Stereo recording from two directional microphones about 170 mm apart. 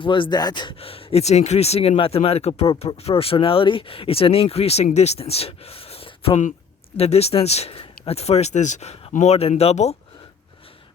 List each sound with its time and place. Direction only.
0.0 s speech: 30° left (ahead or behind)